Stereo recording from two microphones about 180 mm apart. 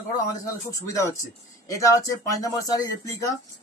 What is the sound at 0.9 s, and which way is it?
Speech, 20° left (ahead or behind).